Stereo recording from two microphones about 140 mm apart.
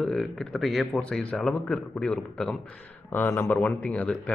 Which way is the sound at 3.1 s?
15° left (ahead or behind).